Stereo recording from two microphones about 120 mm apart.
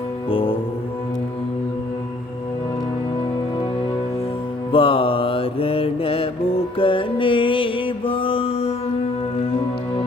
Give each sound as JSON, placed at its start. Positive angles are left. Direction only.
{"t": 0.3, "sound": "music", "side_deg": 50}
{"t": 4.7, "sound": "mantra", "side_deg": 50}
{"t": 6.7, "sound": "music", "side_deg": 45}